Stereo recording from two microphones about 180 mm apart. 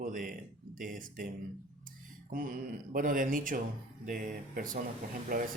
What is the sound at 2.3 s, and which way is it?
Speech, 50° right (ahead or behind).